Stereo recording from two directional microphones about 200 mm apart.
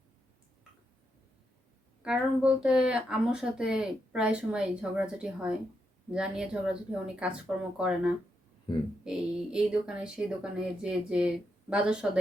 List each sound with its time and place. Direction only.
2.0 s speech: 5° right (ahead or behind)
8.7 s speech: 25° left (ahead or behind)
9.0 s speech: 5° right (ahead or behind)